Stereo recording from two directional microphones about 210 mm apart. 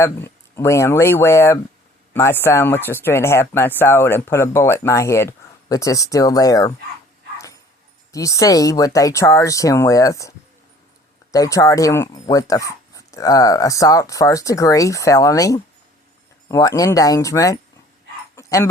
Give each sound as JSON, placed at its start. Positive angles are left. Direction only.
{"t": 0.0, "sound": "speech", "side_deg": 10}
{"t": 8.1, "sound": "speech", "side_deg": 15}
{"t": 18.3, "sound": "dog", "side_deg": 15}